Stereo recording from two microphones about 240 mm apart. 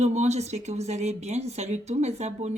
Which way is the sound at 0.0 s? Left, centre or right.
Right.